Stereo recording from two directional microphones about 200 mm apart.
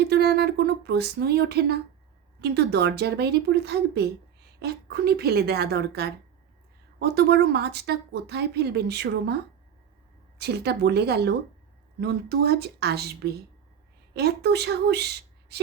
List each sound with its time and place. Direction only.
0.0 s a woman's voice: 55° right (ahead or behind)